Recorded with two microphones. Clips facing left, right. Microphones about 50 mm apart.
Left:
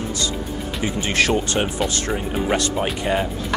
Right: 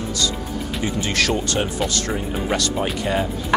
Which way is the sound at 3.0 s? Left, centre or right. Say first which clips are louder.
Left 1 dB; centre.